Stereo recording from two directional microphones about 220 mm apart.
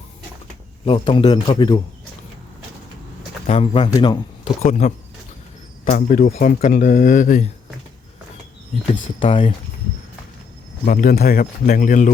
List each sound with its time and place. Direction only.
0.9 s a man's voice: 25° left (ahead or behind)
3.4 s speech: 30° left (ahead or behind)
4.6 s speech: 35° left (ahead or behind)
9.2 s a man's voice: 25° left (ahead or behind)
10.8 s speech: 40° left (ahead or behind)